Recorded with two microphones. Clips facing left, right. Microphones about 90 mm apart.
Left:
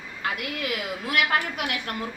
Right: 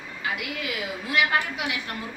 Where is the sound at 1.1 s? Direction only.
60° left (ahead or behind).